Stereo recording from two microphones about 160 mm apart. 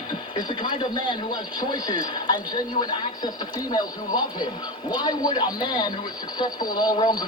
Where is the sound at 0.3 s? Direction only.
30° left (ahead or behind).